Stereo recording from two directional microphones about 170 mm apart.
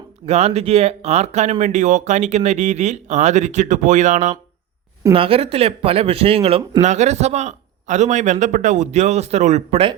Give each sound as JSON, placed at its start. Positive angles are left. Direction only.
{"t": 0.3, "sound": "speech", "side_deg": -40}
{"t": 5.1, "sound": "speech", "side_deg": -30}